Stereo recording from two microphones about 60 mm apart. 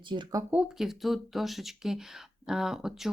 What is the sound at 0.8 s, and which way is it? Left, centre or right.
A woman's voice, centre.